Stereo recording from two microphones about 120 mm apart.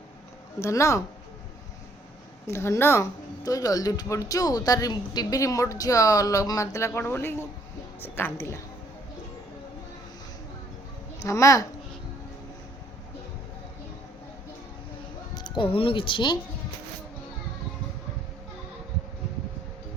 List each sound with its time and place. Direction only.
0.6 s speech: 25° left (ahead or behind)
2.5 s speech: 20° left (ahead or behind)
11.2 s speech: 25° left (ahead or behind)
15.4 s speech: 40° left (ahead or behind)